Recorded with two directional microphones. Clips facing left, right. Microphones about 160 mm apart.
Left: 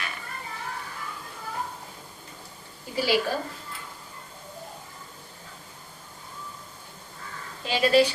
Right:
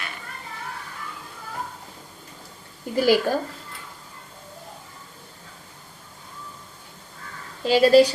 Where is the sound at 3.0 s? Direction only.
50° right (ahead or behind).